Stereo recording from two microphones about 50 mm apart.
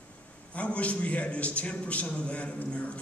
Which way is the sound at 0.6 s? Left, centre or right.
Left.